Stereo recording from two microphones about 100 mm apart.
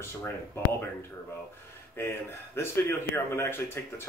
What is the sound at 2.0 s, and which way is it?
Speech, 25° left (ahead or behind).